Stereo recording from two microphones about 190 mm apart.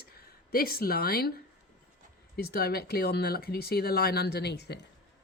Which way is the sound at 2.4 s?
55° left (ahead or behind).